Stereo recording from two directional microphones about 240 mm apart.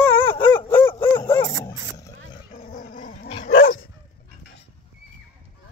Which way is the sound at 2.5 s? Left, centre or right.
Left.